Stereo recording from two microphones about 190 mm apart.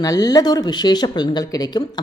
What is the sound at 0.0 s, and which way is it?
Speech, 20° left (ahead or behind).